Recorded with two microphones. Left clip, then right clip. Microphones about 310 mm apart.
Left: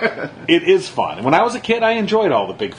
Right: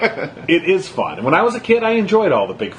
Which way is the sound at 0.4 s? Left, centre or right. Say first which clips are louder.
Left 2 dB; left.